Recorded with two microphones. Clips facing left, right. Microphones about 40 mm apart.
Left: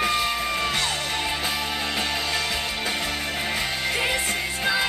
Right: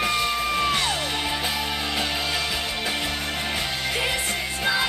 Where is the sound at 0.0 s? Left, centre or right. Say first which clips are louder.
Even; centre.